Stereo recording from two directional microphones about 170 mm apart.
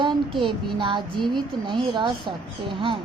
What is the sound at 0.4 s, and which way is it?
A woman's voice, 30° right (ahead or behind).